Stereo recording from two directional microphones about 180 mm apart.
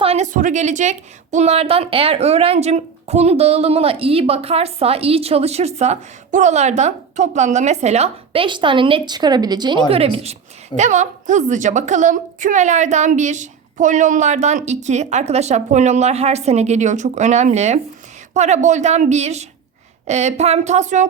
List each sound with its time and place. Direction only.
0.0 s a woman's voice: 35° right (ahead or behind)